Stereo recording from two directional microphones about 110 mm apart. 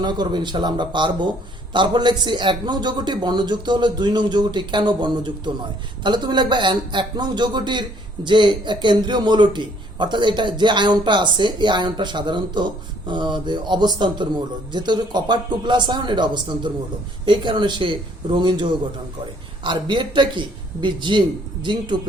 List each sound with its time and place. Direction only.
0.0 s a man's voice: 40° right (ahead or behind)